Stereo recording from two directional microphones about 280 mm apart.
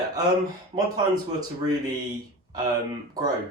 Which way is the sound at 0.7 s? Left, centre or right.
Right.